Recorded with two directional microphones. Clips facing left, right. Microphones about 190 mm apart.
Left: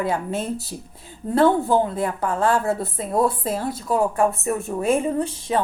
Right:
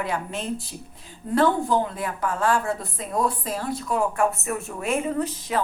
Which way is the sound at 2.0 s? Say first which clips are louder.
Left 4 dB; 30° left (ahead or behind).